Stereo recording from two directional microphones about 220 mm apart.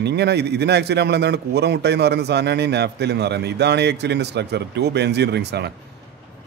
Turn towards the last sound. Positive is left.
turn(degrees=-50)  # may be behind; listen again after turning